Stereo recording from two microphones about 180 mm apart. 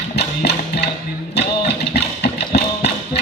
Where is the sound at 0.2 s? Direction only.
70° left (ahead or behind).